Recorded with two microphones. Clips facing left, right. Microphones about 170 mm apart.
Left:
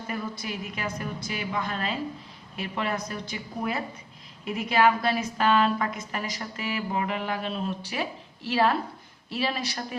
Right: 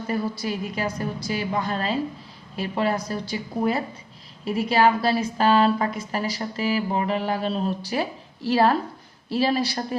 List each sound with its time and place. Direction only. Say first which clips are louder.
0.1 s a woman's voice: right 7 dB; 35° right (ahead or behind)